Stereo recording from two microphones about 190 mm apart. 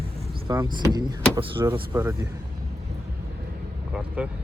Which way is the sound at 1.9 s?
10° right (ahead or behind).